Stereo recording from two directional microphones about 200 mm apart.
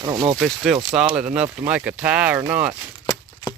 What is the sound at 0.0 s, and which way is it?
Speech, 20° right (ahead or behind).